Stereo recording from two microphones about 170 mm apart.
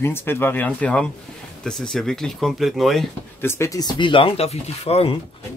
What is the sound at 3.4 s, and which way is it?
Speech, 15° left (ahead or behind).